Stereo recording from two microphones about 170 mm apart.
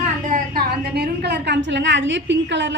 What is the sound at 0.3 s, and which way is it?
A woman's voice, 55° right (ahead or behind).